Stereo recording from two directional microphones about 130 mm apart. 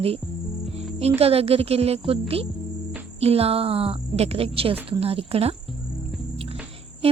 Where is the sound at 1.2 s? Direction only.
50° right (ahead or behind).